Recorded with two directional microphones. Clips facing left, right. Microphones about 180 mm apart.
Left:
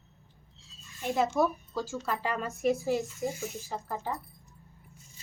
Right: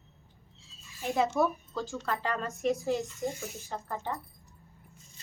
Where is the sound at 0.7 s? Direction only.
Centre (ahead or behind).